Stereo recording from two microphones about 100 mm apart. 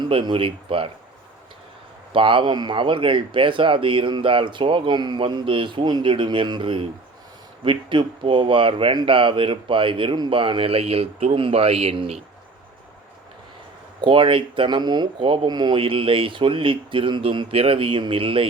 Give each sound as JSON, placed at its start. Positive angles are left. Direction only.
{"t": 0.1, "sound": "speech", "side_deg": -60}
{"t": 2.1, "sound": "speech", "side_deg": -60}
{"t": 14.0, "sound": "speech", "side_deg": -55}
{"t": 15.8, "sound": "speech", "side_deg": -60}